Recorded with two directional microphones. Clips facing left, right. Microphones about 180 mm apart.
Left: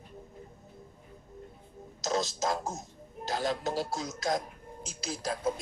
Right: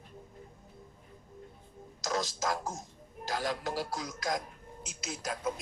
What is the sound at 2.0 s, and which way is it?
A man's voice, 25° left (ahead or behind).